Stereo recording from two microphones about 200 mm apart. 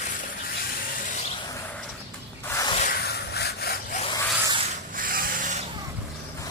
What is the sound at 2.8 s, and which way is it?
Zipper, 45° left (ahead or behind).